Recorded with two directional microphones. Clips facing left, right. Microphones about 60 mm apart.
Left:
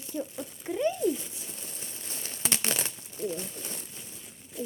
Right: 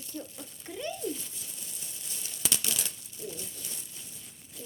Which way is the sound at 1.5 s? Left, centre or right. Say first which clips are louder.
Left 4 dB; left.